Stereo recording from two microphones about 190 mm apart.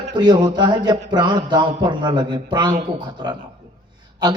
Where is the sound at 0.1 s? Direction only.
20° right (ahead or behind).